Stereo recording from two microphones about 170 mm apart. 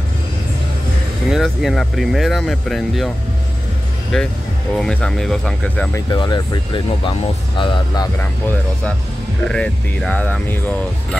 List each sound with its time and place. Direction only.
1.3 s speech: centre (ahead or behind)
4.1 s speech: 5° left (ahead or behind)
5.9 s speech: 25° left (ahead or behind)
8.2 s speech: 10° left (ahead or behind)